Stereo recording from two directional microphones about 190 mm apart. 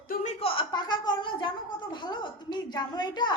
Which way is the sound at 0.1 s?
40° left (ahead or behind).